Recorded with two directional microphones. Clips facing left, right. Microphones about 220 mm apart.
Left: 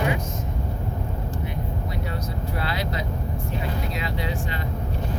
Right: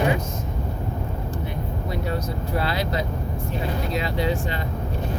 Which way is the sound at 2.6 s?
35° right (ahead or behind).